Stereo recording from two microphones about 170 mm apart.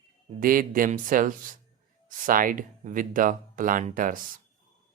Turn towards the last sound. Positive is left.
turn(degrees=-50)  # may be behind; listen again after turning